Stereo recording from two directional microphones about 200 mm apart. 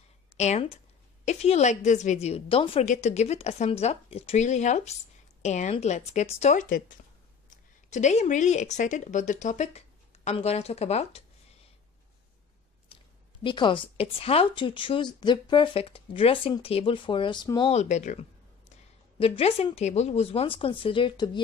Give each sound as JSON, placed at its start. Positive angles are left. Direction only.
{"t": 0.4, "sound": "a woman's voice", "side_deg": 35}
{"t": 13.4, "sound": "speech", "side_deg": 25}